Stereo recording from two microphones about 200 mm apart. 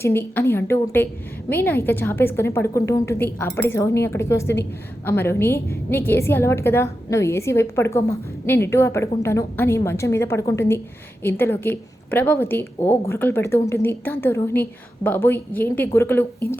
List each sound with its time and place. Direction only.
0.0 s a woman's voice: 10° left (ahead or behind)